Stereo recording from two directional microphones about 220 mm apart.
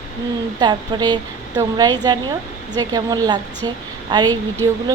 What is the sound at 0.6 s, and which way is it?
A woman's voice, 20° right (ahead or behind).